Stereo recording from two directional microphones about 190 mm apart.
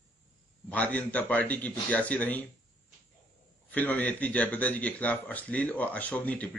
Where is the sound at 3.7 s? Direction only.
10° left (ahead or behind).